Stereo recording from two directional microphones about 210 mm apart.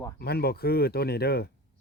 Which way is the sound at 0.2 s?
50° left (ahead or behind).